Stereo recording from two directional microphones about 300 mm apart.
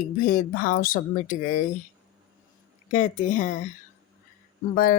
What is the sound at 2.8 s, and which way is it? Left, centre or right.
Speech, left.